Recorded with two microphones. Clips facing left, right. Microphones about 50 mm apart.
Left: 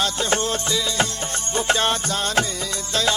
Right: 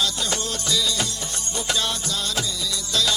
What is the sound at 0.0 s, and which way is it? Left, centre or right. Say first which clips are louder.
Music: left 4 dB; left.